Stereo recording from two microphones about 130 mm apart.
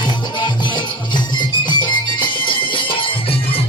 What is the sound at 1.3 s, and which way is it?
Music, 35° left (ahead or behind).